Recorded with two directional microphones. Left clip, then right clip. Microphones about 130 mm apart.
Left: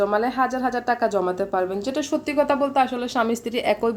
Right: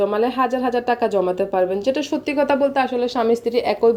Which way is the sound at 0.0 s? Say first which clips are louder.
Right 2 dB; 10° right (ahead or behind).